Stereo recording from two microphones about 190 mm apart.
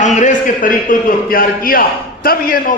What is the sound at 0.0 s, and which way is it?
A man's voice, 40° left (ahead or behind).